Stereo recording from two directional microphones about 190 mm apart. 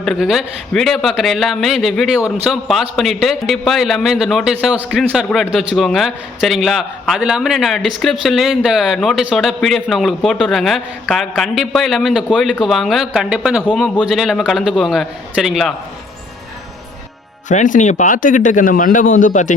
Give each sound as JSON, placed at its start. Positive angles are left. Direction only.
{"t": 0.0, "sound": "a man's voice", "side_deg": 0}
{"t": 17.5, "sound": "a man's voice", "side_deg": 40}